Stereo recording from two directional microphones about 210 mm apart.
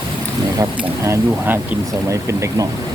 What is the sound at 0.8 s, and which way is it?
Speech, 10° right (ahead or behind).